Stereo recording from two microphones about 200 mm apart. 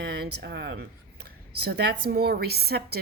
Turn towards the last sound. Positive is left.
turn(degrees=-50)  # may be behind; listen again after turning